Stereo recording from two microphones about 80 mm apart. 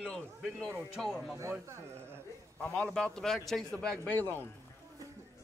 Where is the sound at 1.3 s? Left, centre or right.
Right.